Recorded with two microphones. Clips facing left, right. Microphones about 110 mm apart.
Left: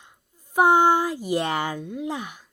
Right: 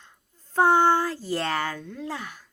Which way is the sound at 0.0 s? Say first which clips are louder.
Left 1 dB; 15° left (ahead or behind).